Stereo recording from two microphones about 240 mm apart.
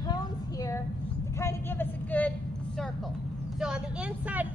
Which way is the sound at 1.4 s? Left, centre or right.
Centre.